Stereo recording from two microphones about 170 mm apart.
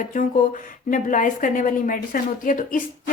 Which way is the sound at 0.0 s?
50° left (ahead or behind).